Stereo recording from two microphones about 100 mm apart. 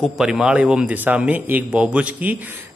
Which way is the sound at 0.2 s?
5° right (ahead or behind).